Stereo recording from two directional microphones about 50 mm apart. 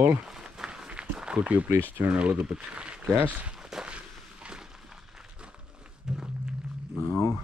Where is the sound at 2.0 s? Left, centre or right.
Right.